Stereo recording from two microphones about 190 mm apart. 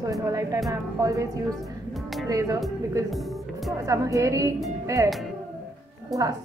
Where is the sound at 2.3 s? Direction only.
15° right (ahead or behind).